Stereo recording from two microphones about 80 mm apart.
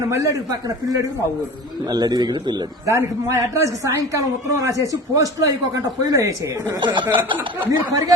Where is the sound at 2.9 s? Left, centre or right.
Right.